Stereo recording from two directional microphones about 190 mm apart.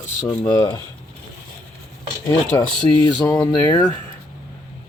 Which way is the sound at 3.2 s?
20° left (ahead or behind).